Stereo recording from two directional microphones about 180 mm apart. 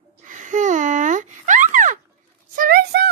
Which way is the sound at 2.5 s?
60° right (ahead or behind).